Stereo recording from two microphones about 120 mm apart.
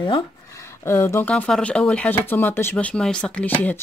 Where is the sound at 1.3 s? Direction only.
10° left (ahead or behind).